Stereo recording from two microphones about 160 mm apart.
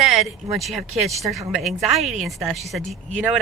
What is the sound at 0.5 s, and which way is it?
Speech, centre (ahead or behind).